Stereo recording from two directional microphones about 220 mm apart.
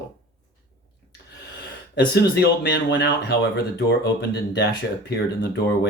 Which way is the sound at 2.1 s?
50° left (ahead or behind).